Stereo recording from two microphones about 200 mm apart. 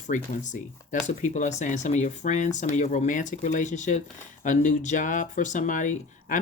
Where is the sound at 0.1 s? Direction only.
40° left (ahead or behind).